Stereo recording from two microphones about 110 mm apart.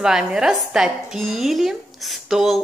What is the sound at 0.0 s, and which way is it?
Speech, 5° right (ahead or behind).